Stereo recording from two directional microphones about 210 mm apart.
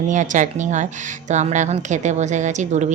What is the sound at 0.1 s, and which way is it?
A woman's voice, 35° right (ahead or behind).